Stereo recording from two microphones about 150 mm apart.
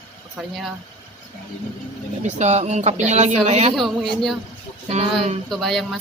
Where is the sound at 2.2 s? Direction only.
50° right (ahead or behind).